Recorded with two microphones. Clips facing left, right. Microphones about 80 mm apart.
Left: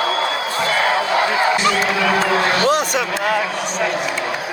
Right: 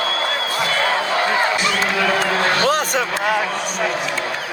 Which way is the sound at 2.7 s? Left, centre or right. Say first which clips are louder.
Left 1 dB; right.